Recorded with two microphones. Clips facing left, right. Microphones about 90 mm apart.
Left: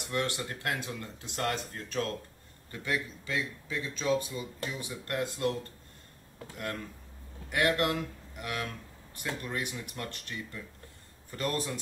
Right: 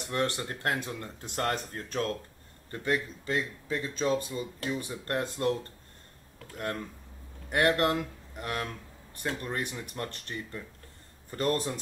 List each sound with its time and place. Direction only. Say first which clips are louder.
0.1 s speech: right 2 dB; 40° right (ahead or behind)
7.4 s a man's voice: right 3 dB; 40° right (ahead or behind)